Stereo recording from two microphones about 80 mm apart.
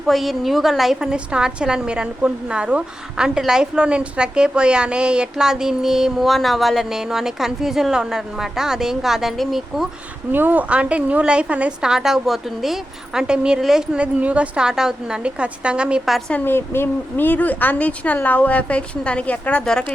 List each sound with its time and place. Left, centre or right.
0.1 s a woman's voice: centre
10.3 s a woman's voice: right
16.3 s a woman's voice: left